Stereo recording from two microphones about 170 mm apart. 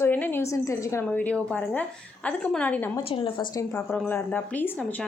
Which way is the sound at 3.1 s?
30° left (ahead or behind).